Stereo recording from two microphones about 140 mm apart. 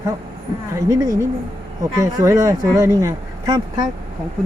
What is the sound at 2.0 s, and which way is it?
Speech, 20° right (ahead or behind).